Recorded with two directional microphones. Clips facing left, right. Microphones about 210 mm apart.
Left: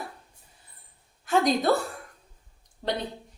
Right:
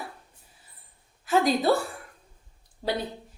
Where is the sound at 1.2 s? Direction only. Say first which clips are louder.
Even; 5° right (ahead or behind).